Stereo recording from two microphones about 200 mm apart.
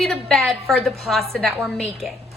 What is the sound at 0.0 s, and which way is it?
A woman's voice, centre (ahead or behind).